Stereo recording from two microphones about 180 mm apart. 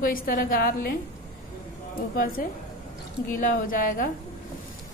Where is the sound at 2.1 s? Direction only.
50° left (ahead or behind).